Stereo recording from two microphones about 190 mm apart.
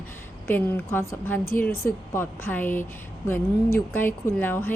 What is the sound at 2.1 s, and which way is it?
A woman's voice, 10° left (ahead or behind).